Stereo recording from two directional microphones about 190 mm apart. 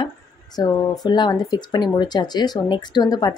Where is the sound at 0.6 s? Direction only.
20° left (ahead or behind).